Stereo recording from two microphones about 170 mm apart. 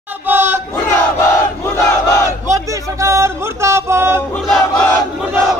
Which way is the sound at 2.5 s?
20° right (ahead or behind).